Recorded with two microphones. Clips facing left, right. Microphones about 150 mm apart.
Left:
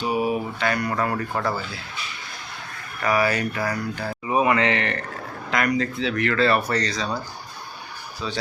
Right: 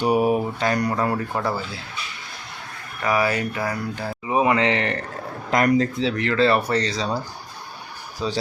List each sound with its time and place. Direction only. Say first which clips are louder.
0.0 s mantra: right 4 dB; 55° right (ahead or behind)
0.6 s speech: right 2 dB; 35° right (ahead or behind)
0.9 s speech: right 2 dB; 15° right (ahead or behind)
1.3 s speech: right 1 dB; 5° right (ahead or behind)
3.0 s speech: even; 15° right (ahead or behind)
8.2 s speech: right 5 dB; 35° right (ahead or behind)